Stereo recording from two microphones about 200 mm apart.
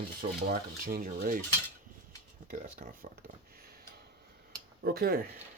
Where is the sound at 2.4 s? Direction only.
45° right (ahead or behind).